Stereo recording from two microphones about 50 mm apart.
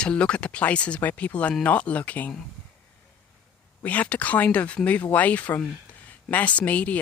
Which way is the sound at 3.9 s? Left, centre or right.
Left.